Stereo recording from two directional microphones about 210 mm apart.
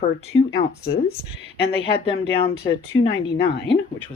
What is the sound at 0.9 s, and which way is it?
Speech, 50° left (ahead or behind).